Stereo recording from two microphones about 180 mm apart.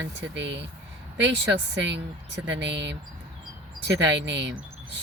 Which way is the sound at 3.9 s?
90° right.